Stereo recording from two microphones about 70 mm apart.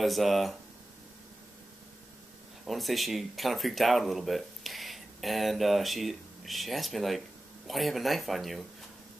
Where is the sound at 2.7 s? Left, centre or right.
Centre.